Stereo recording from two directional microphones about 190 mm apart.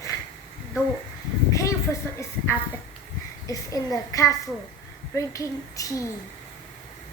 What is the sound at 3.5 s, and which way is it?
A woman's voice, 15° left (ahead or behind).